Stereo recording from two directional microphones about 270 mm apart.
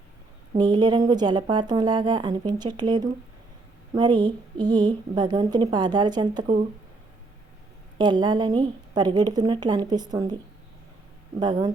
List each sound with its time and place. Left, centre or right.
0.5 s speech: centre
7.9 s speech: centre
11.3 s speech: centre